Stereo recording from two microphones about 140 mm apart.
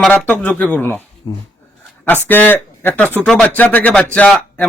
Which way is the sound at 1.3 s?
25° left (ahead or behind).